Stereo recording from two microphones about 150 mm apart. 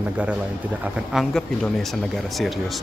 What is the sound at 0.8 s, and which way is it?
Speech, centre (ahead or behind).